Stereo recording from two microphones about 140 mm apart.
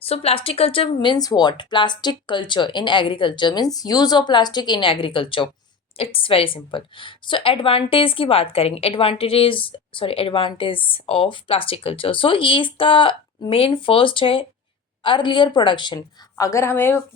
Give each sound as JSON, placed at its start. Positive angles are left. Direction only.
{"t": 0.0, "sound": "speech", "side_deg": 45}